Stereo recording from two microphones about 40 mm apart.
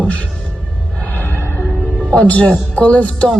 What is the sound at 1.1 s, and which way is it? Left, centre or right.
Music, left.